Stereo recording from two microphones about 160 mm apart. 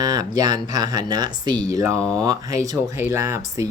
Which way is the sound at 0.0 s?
25° right (ahead or behind).